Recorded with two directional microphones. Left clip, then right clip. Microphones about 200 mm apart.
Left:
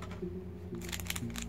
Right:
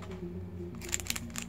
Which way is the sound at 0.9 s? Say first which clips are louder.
Right 4 dB; centre (ahead or behind).